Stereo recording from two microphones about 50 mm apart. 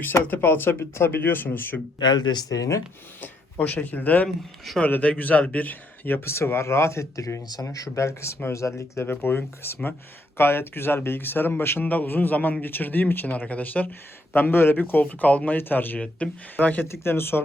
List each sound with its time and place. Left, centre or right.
0.0 s speech: left
3.2 s a man's voice: left
6.1 s speech: left
8.5 s speech: left
9.0 s speech: left
11.8 s a man's voice: left
13.3 s a man's voice: left
14.3 s speech: left
15.0 s a man's voice: left
16.0 s a man's voice: left
16.8 s speech: left